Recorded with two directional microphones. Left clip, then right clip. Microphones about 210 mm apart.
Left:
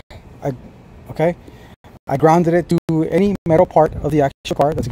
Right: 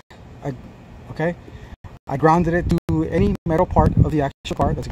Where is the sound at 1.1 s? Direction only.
35° left (ahead or behind).